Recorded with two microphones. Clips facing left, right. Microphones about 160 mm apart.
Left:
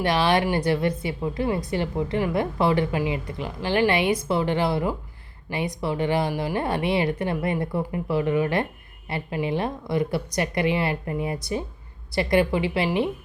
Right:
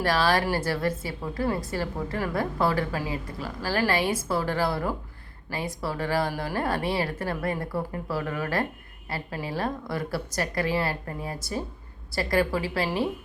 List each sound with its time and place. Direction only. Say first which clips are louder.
0.0 s a woman's voice: left 2 dB; 20° left (ahead or behind)